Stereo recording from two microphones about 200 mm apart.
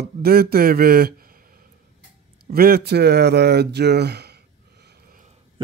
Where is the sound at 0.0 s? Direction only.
50° right (ahead or behind).